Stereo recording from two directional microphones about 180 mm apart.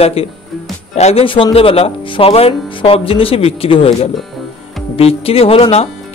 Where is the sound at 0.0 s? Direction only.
35° left (ahead or behind).